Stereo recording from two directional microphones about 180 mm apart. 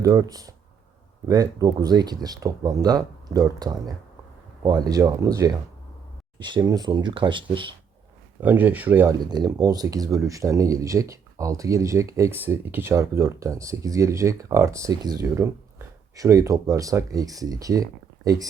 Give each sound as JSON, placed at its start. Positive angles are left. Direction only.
{"t": 0.0, "sound": "speech", "side_deg": -20}
{"t": 8.4, "sound": "speech", "side_deg": -10}
{"t": 9.3, "sound": "speech", "side_deg": -20}